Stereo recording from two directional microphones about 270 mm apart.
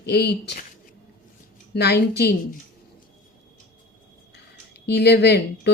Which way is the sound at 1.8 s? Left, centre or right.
Left.